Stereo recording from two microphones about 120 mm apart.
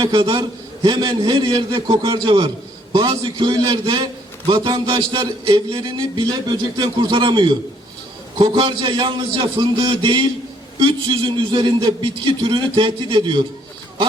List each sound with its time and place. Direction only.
0.0 s a man's voice: 45° right (ahead or behind)